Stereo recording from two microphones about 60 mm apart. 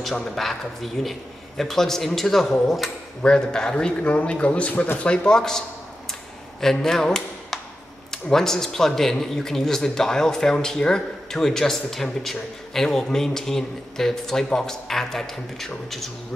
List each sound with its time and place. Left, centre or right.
0.0 s speech: centre
3.2 s speech: centre
6.6 s speech: centre